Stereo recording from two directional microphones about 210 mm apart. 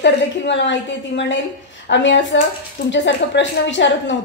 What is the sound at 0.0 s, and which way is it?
A woman's voice, 60° left (ahead or behind).